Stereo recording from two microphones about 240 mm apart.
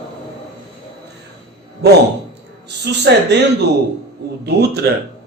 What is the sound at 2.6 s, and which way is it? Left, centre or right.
Speech, right.